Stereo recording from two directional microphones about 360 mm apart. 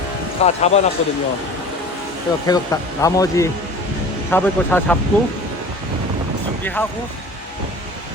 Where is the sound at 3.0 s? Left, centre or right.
Centre.